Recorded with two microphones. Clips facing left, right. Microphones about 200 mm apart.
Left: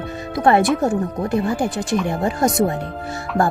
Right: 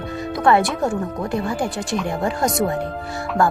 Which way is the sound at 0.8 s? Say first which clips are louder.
Left 2 dB; 20° left (ahead or behind).